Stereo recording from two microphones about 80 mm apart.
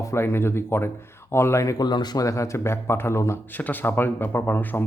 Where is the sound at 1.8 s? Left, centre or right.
Left.